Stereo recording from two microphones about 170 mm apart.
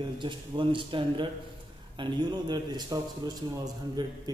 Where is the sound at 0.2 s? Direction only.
30° right (ahead or behind).